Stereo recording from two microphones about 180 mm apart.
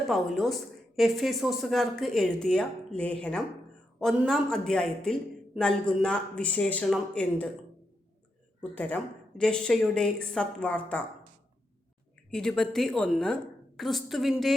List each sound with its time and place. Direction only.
0.1 s a woman's voice: centre (ahead or behind)
8.7 s a woman's voice: 5° left (ahead or behind)
12.3 s a woman's voice: 5° left (ahead or behind)